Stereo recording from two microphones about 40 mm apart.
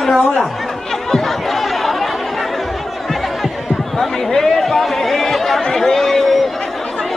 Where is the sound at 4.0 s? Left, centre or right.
Centre.